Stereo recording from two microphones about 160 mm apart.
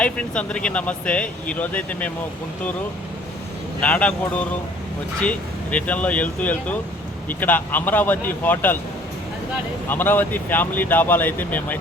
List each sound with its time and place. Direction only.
0.0 s speech: 5° left (ahead or behind)
3.8 s speech: 10° left (ahead or behind)
9.9 s speech: 10° left (ahead or behind)